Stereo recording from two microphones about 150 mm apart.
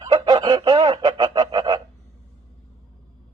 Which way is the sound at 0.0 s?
30° right (ahead or behind).